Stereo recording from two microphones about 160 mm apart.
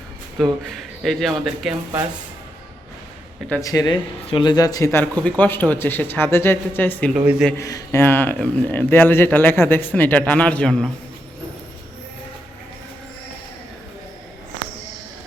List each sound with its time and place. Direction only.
0.7 s a man's voice: centre (ahead or behind)
3.6 s speech: 25° left (ahead or behind)
7.1 s a man's voice: 5° right (ahead or behind)
7.5 s speech: 20° left (ahead or behind); by 10.9 s 5° left (ahead or behind)